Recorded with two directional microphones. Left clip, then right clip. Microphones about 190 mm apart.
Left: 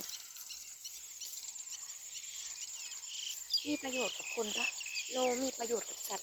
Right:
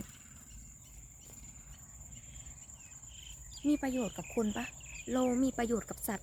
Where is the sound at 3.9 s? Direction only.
35° right (ahead or behind).